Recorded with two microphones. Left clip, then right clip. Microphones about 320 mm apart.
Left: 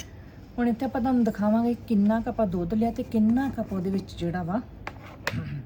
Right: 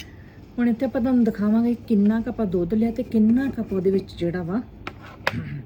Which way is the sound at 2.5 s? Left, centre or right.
Centre.